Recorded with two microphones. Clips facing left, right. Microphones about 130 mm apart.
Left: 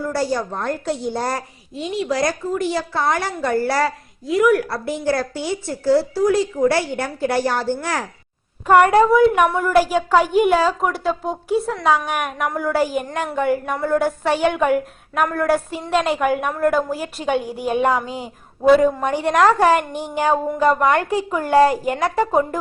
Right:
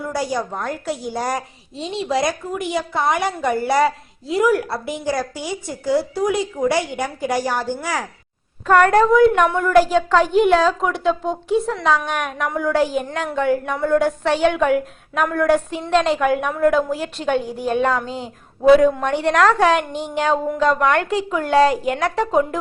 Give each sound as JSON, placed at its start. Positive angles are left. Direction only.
{"t": 0.0, "sound": "a woman's voice", "side_deg": -15}
{"t": 1.4, "sound": "a woman's voice", "side_deg": -25}
{"t": 4.9, "sound": "speech", "side_deg": -15}
{"t": 8.6, "sound": "a woman's voice", "side_deg": 10}